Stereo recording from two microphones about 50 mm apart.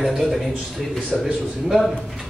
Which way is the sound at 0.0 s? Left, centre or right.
Centre.